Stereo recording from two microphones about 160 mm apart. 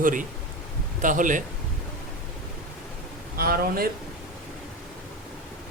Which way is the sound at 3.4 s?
65° right (ahead or behind).